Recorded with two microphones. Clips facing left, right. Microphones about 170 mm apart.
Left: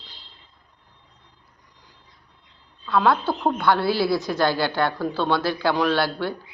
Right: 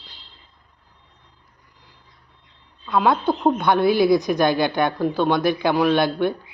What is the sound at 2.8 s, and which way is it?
A woman's voice, 20° right (ahead or behind).